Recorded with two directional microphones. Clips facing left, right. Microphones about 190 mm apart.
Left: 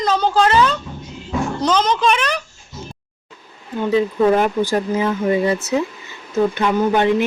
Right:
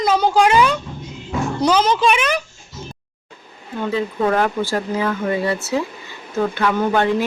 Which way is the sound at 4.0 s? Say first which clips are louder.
Left 4 dB; 20° left (ahead or behind).